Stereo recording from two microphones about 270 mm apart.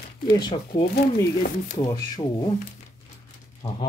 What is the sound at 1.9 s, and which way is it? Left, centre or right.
Speech, centre.